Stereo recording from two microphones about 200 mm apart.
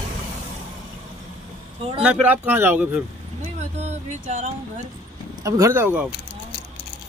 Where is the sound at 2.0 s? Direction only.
5° right (ahead or behind).